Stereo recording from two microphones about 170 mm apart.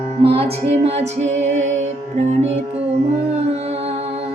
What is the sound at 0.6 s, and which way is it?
Music, 40° right (ahead or behind).